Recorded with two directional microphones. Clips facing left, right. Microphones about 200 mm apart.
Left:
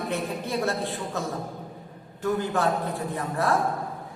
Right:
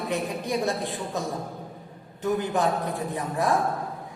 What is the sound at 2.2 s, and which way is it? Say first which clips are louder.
A man's voice: even; 15° right (ahead or behind).